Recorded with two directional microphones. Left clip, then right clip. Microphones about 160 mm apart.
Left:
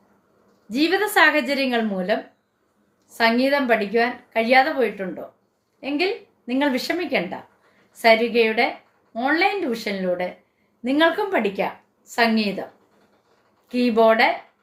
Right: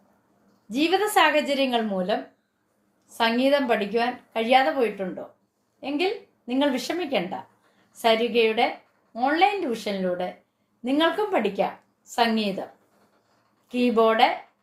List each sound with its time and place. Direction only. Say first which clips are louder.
0.7 s a woman's voice: left 2 dB; 15° left (ahead or behind)
13.7 s speech: left 4 dB; 15° left (ahead or behind)